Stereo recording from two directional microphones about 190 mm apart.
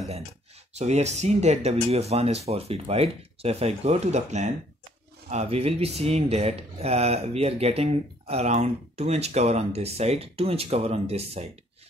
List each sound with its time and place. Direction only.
0.7 s speech: 35° right (ahead or behind)